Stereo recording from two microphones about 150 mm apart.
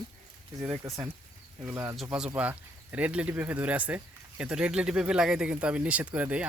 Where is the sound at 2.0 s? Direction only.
5° right (ahead or behind).